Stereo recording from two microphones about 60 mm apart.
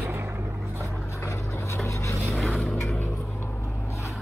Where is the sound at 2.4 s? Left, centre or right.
Centre.